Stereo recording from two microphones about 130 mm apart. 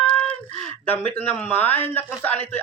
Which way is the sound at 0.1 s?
10° left (ahead or behind).